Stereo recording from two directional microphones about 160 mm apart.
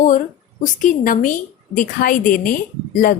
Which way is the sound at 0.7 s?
55° left (ahead or behind).